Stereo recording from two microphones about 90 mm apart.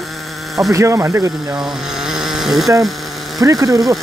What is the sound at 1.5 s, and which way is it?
Speech, 5° right (ahead or behind).